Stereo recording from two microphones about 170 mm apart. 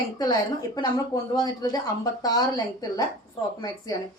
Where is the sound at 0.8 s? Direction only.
20° left (ahead or behind).